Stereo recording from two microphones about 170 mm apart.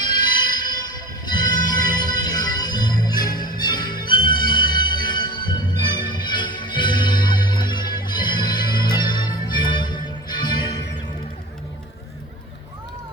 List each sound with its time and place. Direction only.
0.2 s train: 25° left (ahead or behind)